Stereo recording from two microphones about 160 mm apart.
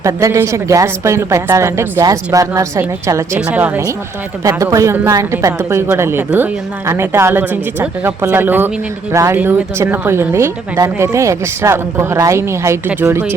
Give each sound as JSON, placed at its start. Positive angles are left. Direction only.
{"t": 0.0, "sound": "a woman's voice", "side_deg": -20}
{"t": 4.4, "sound": "a woman's voice", "side_deg": -20}